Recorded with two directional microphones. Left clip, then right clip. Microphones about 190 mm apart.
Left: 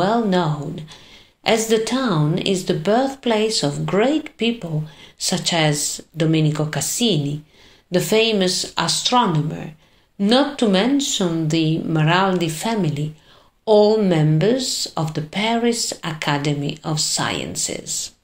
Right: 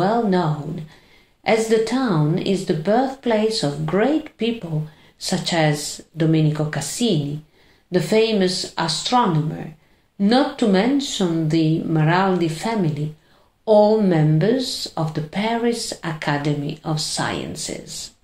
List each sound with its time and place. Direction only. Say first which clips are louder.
0.0 s speech: left 1 dB; 30° left (ahead or behind)